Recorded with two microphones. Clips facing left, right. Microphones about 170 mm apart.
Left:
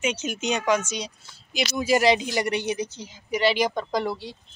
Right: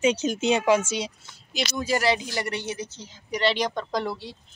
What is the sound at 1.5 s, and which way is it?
Speech, 10° left (ahead or behind).